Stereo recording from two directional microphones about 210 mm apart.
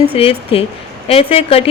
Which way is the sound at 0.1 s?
25° left (ahead or behind).